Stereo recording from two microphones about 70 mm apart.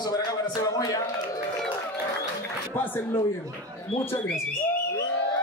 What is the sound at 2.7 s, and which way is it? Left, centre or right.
Speech, left.